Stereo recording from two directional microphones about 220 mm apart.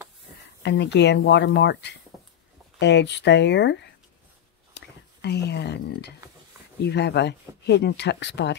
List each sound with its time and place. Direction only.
0.6 s speech: 50° left (ahead or behind)